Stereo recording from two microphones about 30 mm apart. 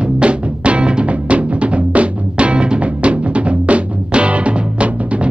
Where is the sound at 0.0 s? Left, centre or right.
Right.